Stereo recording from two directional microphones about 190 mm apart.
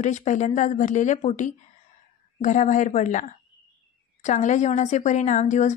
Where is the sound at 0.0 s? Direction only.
40° left (ahead or behind).